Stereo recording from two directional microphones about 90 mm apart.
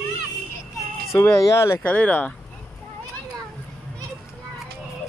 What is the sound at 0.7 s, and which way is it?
Speech, 35° left (ahead or behind).